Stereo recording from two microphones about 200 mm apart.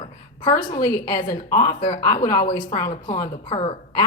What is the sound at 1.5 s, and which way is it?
A woman's voice, 20° left (ahead or behind).